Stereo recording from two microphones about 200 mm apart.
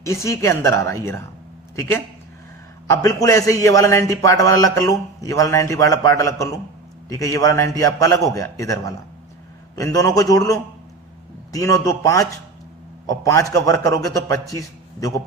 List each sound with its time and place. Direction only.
0.0 s a man's voice: 15° left (ahead or behind)
13.3 s a man's voice: 15° left (ahead or behind)